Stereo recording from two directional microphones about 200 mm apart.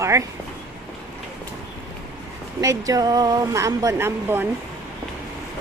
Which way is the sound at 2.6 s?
15° right (ahead or behind).